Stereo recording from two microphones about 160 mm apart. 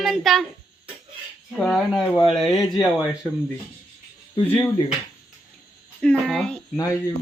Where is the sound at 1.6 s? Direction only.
5° left (ahead or behind).